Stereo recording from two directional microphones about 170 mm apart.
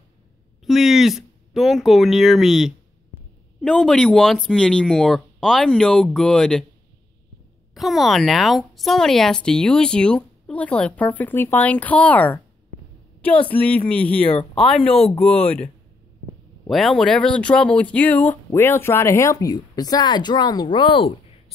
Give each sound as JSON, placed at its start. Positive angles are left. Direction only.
{"t": 0.7, "sound": "a woman's voice", "side_deg": 0}
{"t": 7.7, "sound": "a woman's voice", "side_deg": 0}
{"t": 13.5, "sound": "speech", "side_deg": 10}
{"t": 14.3, "sound": "speech", "side_deg": 30}
{"t": 15.2, "sound": "speech", "side_deg": 10}